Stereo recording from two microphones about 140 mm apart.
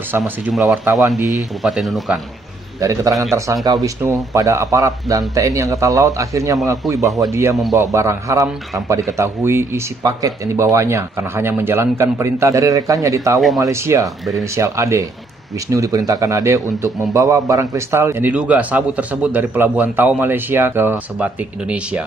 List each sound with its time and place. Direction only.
0.2 s speech: centre (ahead or behind)
2.8 s a man's voice: 25° right (ahead or behind)